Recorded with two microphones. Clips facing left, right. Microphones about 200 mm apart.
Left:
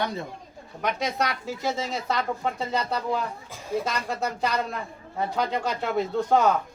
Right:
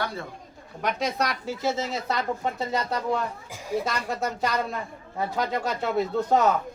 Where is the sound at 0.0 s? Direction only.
20° left (ahead or behind).